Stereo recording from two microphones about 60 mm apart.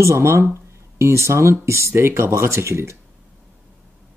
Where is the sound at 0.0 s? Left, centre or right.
Right.